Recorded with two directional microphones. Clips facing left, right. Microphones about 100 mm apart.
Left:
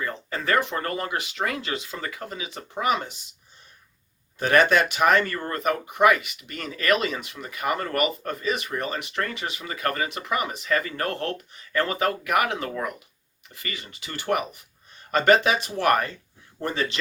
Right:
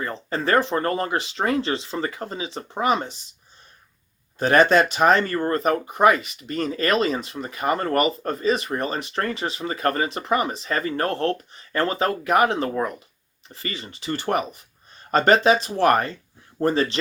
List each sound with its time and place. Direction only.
0.0 s speech: 35° right (ahead or behind)
4.4 s speech: 35° right (ahead or behind)